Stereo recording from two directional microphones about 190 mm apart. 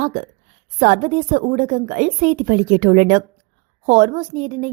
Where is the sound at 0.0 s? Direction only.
45° right (ahead or behind).